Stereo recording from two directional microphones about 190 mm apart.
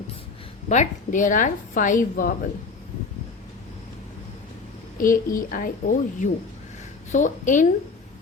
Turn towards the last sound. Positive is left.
turn(degrees=40)  # may be behind; listen again after turning